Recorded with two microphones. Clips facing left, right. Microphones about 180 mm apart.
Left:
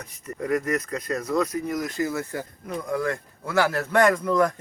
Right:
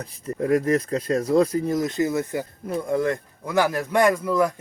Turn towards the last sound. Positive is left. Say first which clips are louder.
# right 1 dB
turn(degrees=-10)  # may be behind; listen again after turning